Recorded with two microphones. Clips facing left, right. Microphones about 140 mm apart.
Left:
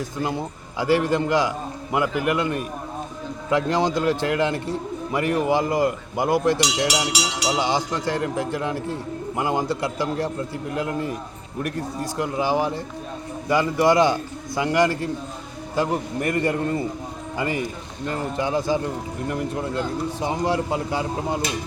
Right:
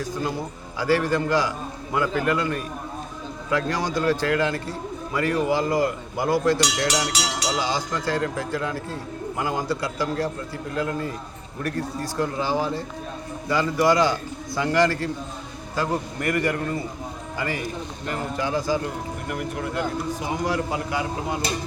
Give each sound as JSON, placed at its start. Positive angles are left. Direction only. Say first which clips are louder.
{"t": 0.0, "sound": "a man's voice", "louder": "left 1 dB", "side_deg": 20}